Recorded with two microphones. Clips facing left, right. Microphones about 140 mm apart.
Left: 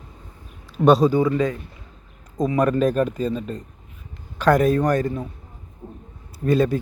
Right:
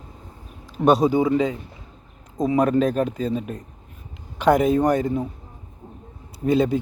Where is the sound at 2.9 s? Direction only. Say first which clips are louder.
Left 1 dB; 15° right (ahead or behind).